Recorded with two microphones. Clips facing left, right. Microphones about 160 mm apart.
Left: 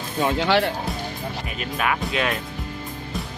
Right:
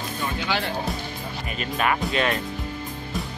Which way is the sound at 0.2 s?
75° left (ahead or behind).